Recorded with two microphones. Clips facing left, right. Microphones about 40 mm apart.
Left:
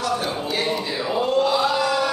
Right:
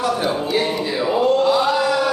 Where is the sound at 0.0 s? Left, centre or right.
Centre.